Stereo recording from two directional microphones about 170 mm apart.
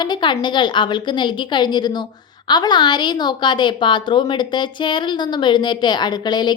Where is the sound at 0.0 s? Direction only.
25° left (ahead or behind).